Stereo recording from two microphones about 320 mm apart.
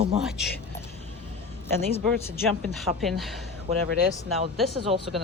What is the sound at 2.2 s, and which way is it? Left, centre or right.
Speech, centre.